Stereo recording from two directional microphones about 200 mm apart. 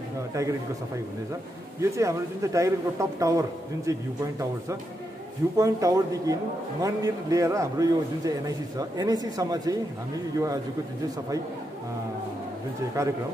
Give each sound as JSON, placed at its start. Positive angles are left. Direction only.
{"t": 0.3, "sound": "a man's voice", "side_deg": -15}
{"t": 1.8, "sound": "a man's voice", "side_deg": -15}
{"t": 5.6, "sound": "a man's voice", "side_deg": -15}
{"t": 13.0, "sound": "a man's voice", "side_deg": -15}